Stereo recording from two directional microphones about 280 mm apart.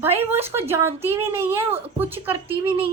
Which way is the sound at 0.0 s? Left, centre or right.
Centre.